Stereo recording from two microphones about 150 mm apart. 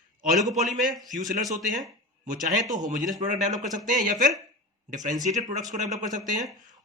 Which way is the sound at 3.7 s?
60° right (ahead or behind).